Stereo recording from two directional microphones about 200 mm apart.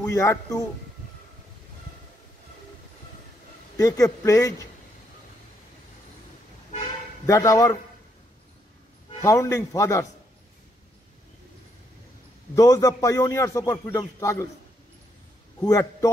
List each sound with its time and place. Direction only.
0.0 s a man's voice: 15° left (ahead or behind)
3.7 s a man's voice: 15° left (ahead or behind)
7.2 s a man's voice: 15° left (ahead or behind)
9.2 s a man's voice: 15° left (ahead or behind)
12.5 s a man's voice: 15° left (ahead or behind)
15.6 s a man's voice: 15° left (ahead or behind)